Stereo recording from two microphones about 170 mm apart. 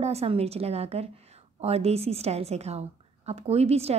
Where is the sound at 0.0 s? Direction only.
35° right (ahead or behind).